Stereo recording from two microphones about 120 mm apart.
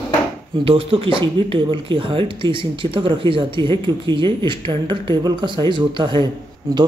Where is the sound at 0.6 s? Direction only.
50° right (ahead or behind).